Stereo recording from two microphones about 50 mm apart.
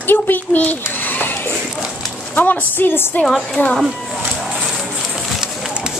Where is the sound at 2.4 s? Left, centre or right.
Left.